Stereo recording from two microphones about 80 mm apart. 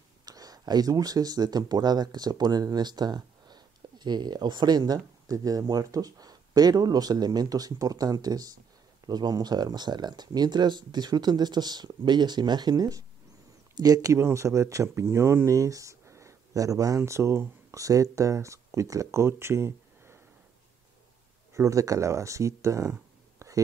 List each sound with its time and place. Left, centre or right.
0.2 s speech: right
21.5 s speech: right
23.4 s whispering: right